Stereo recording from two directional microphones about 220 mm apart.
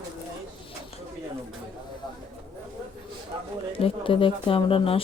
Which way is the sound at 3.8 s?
25° left (ahead or behind).